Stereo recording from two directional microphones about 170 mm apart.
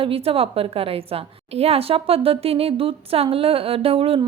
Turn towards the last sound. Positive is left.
turn(degrees=-35)  # may be behind; listen again after turning